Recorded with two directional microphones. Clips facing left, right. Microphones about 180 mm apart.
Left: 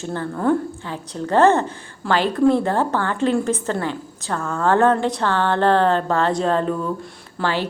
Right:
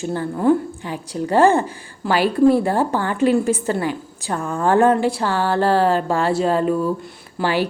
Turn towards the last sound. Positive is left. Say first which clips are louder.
# right 3 dB
turn(degrees=-10)  # may be behind; listen again after turning